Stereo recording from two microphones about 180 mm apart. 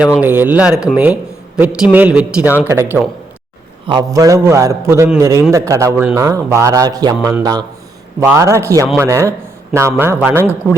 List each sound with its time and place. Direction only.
0.2 s a man's voice: 10° right (ahead or behind)